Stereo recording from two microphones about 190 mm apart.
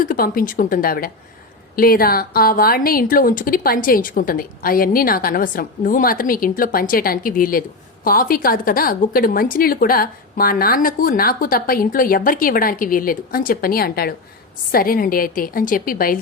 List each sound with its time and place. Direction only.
0.0 s a woman's voice: 50° left (ahead or behind)